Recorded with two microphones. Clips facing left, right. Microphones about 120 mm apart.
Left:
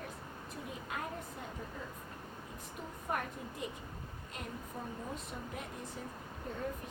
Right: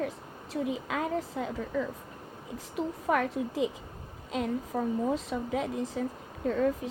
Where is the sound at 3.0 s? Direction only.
90° right.